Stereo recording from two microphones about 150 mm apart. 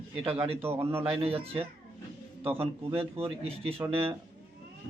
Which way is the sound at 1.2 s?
40° right (ahead or behind).